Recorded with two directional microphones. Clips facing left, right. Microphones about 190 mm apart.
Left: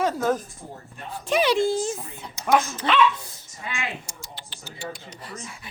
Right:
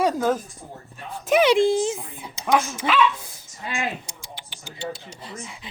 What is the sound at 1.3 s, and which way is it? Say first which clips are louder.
Speech: right 4 dB; 15° right (ahead or behind).